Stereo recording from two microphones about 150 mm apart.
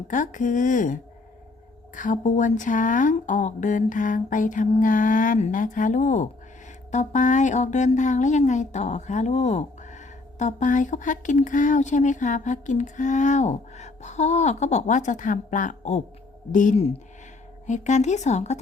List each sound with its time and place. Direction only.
0.1 s speech: 60° left (ahead or behind)
2.0 s speech: 60° left (ahead or behind)